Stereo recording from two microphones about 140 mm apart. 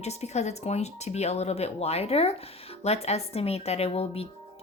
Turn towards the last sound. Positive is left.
turn(degrees=45)  # may be behind; listen again after turning